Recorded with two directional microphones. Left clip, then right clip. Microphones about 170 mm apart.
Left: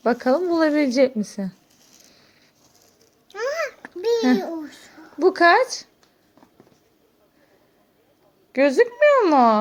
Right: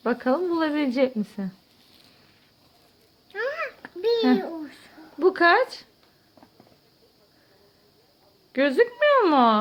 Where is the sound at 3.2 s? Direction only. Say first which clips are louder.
Left 3 dB; 25° left (ahead or behind).